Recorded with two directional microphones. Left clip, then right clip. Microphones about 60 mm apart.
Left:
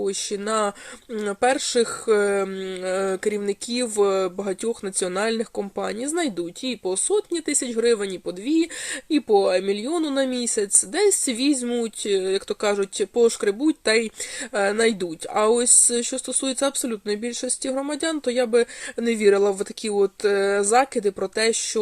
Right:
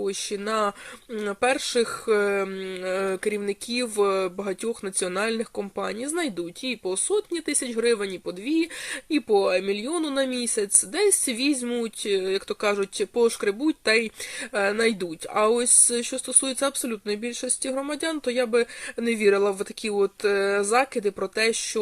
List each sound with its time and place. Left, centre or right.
0.0 s speech: left